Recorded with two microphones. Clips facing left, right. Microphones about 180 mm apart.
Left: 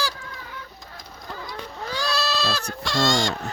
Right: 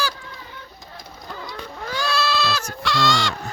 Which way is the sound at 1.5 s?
35° left (ahead or behind).